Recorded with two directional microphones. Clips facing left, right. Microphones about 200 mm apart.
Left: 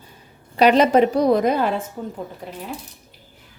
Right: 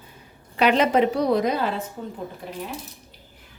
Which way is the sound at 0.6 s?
40° left (ahead or behind).